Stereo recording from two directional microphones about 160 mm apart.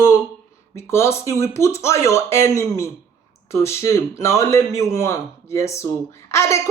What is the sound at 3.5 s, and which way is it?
Speech, 15° left (ahead or behind).